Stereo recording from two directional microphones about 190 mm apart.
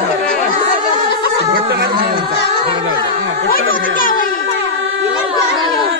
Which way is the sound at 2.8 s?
70° right (ahead or behind).